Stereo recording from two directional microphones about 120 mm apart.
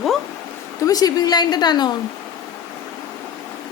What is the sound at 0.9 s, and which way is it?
A woman's voice, 30° left (ahead or behind).